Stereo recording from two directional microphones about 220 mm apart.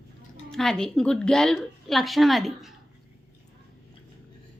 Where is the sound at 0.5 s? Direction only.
5° left (ahead or behind).